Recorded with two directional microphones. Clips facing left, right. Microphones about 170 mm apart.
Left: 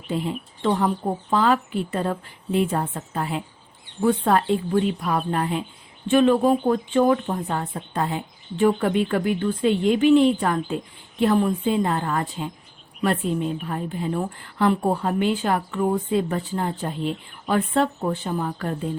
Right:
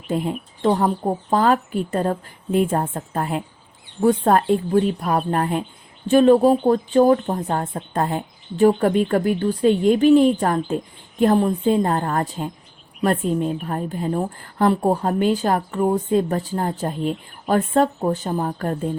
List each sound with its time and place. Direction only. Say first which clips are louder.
0.1 s speech: right 3 dB; 45° right (ahead or behind)